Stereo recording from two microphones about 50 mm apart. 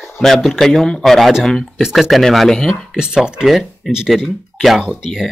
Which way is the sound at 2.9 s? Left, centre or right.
Centre.